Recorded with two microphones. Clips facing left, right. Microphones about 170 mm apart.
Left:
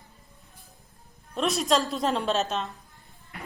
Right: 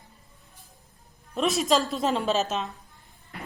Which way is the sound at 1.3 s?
Centre (ahead or behind).